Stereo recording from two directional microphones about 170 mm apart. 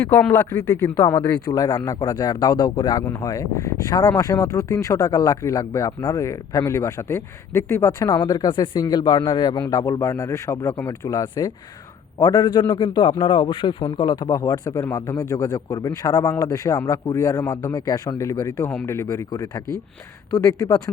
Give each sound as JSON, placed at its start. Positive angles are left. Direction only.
{"t": 0.0, "sound": "speech", "side_deg": 5}